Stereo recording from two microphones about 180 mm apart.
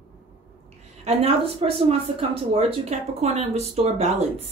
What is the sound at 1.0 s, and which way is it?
Speech, 35° right (ahead or behind).